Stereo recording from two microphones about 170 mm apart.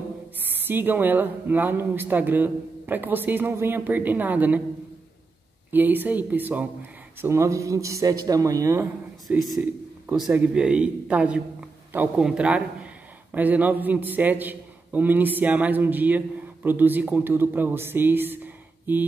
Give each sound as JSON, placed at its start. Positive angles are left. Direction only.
{"t": 0.5, "sound": "speech", "side_deg": -10}
{"t": 5.7, "sound": "speech", "side_deg": -10}
{"t": 9.3, "sound": "a man's voice", "side_deg": -5}